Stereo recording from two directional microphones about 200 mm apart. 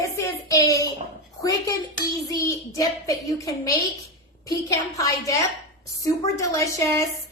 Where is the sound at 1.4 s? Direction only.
20° left (ahead or behind).